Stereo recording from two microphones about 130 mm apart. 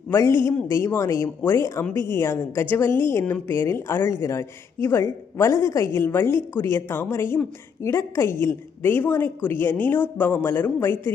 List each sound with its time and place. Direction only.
0.1 s a woman's voice: 20° left (ahead or behind)